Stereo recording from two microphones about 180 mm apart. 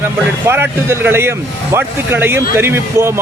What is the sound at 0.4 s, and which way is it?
Speech, 10° right (ahead or behind).